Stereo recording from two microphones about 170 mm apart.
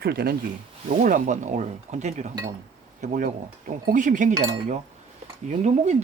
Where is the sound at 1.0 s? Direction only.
50° right (ahead or behind).